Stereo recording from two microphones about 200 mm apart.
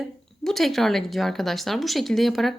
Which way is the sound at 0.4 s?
Centre (ahead or behind).